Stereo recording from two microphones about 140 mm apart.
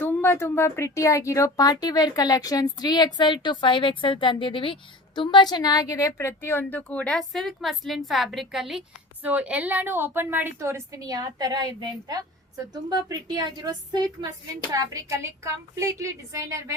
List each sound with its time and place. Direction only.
0.0 s a woman's voice: 15° left (ahead or behind); by 16.7 s 20° right (ahead or behind)